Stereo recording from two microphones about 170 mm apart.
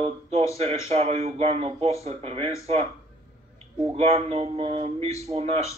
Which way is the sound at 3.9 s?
35° right (ahead or behind).